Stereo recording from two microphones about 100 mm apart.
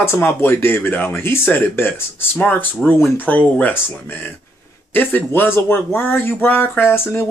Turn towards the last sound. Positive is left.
turn(degrees=20)  # may be behind; listen again after turning